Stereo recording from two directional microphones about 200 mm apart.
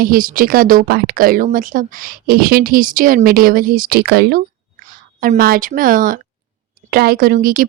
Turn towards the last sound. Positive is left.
turn(degrees=-45)  # may be behind; listen again after turning